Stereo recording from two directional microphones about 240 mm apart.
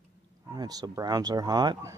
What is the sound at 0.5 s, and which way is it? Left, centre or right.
Speech, centre.